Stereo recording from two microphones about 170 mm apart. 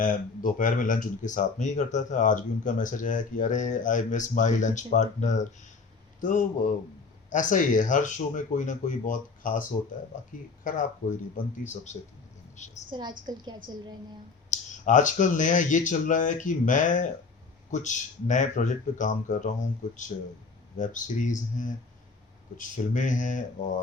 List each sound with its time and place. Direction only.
0.0 s speech: 50° left (ahead or behind)
12.9 s a woman's voice: 25° right (ahead or behind)
14.5 s speech: 45° left (ahead or behind)